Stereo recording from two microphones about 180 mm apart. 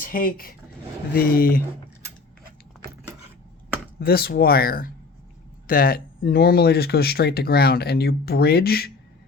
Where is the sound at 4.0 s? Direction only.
60° left (ahead or behind).